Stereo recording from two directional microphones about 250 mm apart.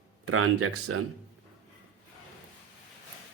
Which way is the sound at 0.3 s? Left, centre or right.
Right.